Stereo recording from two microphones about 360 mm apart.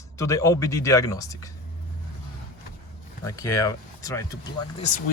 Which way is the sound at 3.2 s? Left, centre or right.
Centre.